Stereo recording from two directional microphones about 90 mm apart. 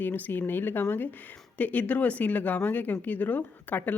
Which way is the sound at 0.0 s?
20° left (ahead or behind).